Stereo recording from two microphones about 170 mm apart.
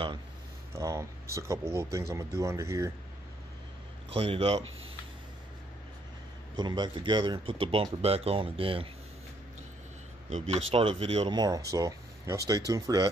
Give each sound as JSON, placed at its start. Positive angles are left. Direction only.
{"t": 0.7, "sound": "speech", "side_deg": -15}
{"t": 4.1, "sound": "speech", "side_deg": -35}
{"t": 6.5, "sound": "speech", "side_deg": -25}
{"t": 10.3, "sound": "speech", "side_deg": -40}
{"t": 11.3, "sound": "speech", "side_deg": -20}